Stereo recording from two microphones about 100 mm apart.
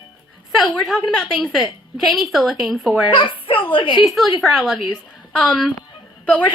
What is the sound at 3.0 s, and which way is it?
Speech, 60° left (ahead or behind).